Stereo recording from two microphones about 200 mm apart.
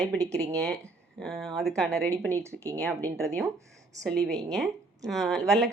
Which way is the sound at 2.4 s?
15° right (ahead or behind).